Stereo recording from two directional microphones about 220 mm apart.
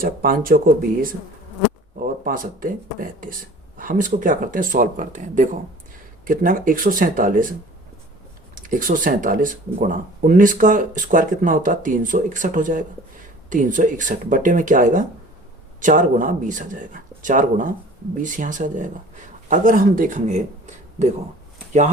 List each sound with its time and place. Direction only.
0.0 s speech: 40° right (ahead or behind)
8.5 s speech: 40° right (ahead or behind)